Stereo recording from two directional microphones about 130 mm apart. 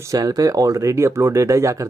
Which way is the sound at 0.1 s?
30° right (ahead or behind).